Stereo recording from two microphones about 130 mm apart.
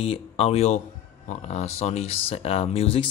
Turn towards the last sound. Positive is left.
turn(degrees=45)  # may be behind; listen again after turning